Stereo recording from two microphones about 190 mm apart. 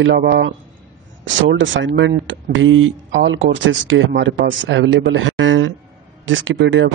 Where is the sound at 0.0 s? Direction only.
65° right (ahead or behind).